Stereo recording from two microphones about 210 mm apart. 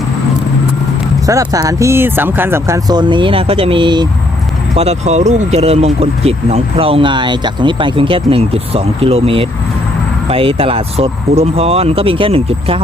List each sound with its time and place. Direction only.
1.3 s speech: 15° right (ahead or behind)
4.7 s speech: 30° right (ahead or behind)